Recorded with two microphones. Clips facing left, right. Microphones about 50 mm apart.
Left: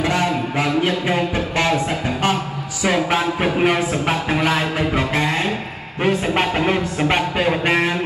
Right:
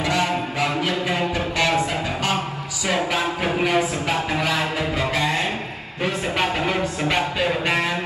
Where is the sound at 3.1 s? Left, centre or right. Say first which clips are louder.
Left 4 dB; left.